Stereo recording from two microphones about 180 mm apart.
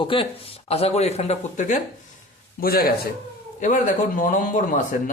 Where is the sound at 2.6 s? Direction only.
55° left (ahead or behind).